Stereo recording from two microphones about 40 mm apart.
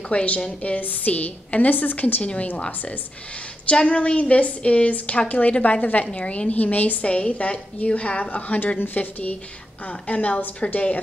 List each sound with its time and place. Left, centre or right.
0.1 s a woman's voice: left
3.8 s a woman's voice: left
6.1 s a woman's voice: left
6.5 s a woman's voice: left
7.1 s a woman's voice: left
8.7 s speech: left
10.0 s a woman's voice: left